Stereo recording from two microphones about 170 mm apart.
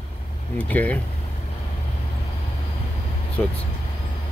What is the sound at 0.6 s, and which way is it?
Speech, 10° left (ahead or behind).